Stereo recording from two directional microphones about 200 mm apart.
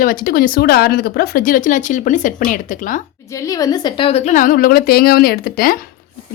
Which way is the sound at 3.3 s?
15° left (ahead or behind).